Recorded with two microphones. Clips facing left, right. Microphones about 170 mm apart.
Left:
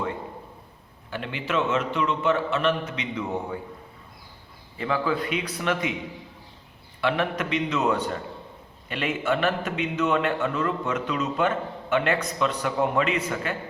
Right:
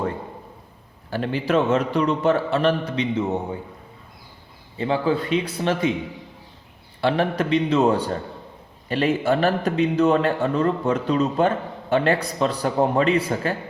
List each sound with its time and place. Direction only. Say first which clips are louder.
1.1 s a man's voice: right 7 dB; 35° right (ahead or behind)
4.8 s a man's voice: right 4 dB; 25° right (ahead or behind)
7.0 s a man's voice: right 4 dB; 30° right (ahead or behind)